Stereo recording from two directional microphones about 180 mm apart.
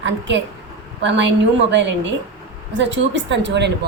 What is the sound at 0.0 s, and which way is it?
A woman's voice, 85° right.